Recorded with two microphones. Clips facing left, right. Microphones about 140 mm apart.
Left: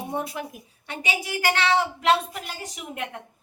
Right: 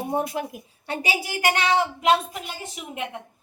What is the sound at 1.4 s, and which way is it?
A woman's voice, 15° right (ahead or behind).